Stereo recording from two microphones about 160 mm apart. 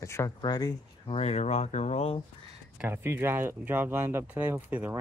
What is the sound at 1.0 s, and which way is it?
Speech, 40° left (ahead or behind).